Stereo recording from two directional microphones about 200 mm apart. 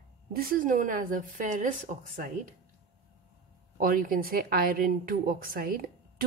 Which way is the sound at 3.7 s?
45° right (ahead or behind).